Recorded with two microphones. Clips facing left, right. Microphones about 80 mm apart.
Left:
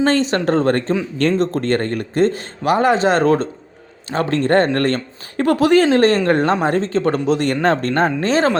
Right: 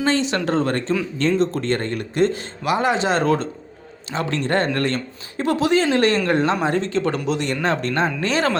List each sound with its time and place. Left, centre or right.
0.0 s speech: left
5.9 s speech: left